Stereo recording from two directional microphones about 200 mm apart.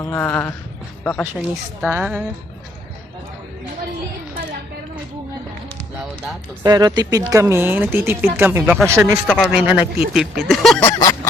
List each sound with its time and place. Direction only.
0.1 s a sound: 10° left (ahead or behind)
1.0 s speech: 5° left (ahead or behind)
1.4 s speech: 10° right (ahead or behind)
6.6 s speech: 20° right (ahead or behind)
9.2 s speech: centre (ahead or behind)
9.6 s speech: 25° left (ahead or behind)
10.1 s speech: centre (ahead or behind)